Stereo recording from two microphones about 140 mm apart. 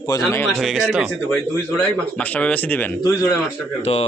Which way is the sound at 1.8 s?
10° left (ahead or behind).